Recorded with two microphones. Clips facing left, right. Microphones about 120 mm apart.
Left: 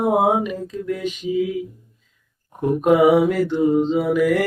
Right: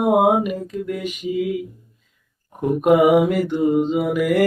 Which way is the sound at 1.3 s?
50° right (ahead or behind).